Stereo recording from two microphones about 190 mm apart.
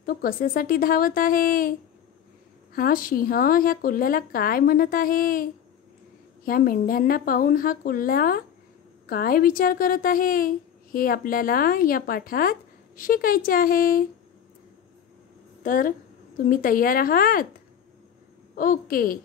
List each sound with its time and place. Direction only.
0.0 s a woman's voice: 50° left (ahead or behind)
15.6 s a woman's voice: 45° left (ahead or behind)
18.5 s a woman's voice: 45° left (ahead or behind)